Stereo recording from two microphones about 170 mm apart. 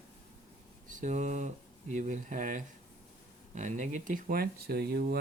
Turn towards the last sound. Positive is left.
turn(degrees=-70)  # may be behind; listen again after turning